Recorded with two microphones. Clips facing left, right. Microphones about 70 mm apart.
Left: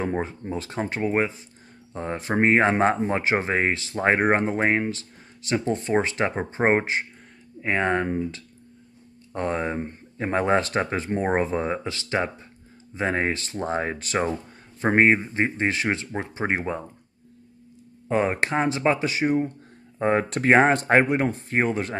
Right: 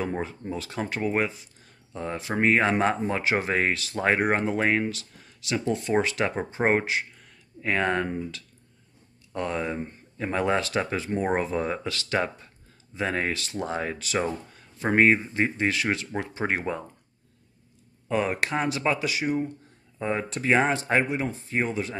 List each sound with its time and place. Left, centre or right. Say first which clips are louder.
0.0 s speech: left 3 dB; left
2.0 s speech: left 4 dB; left
18.0 s speech: left 3 dB; left
20.0 s speech: left 6 dB; left